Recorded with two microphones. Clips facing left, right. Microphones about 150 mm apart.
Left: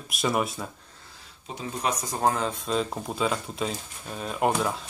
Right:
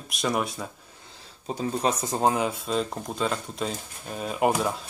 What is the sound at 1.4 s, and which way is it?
Speech, 35° right (ahead or behind).